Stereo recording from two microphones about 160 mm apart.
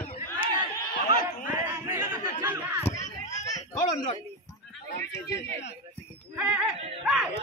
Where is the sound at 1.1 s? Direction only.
65° left (ahead or behind).